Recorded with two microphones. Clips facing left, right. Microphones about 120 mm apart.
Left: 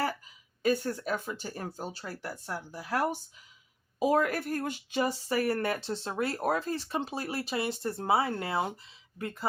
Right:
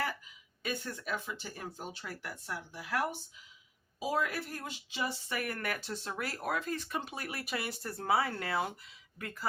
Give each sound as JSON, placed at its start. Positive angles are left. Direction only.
{"t": 0.6, "sound": "speech", "side_deg": 40}
{"t": 4.0, "sound": "speech", "side_deg": 50}